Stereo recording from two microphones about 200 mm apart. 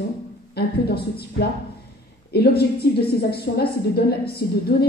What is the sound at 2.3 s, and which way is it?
A woman's voice, 50° left (ahead or behind).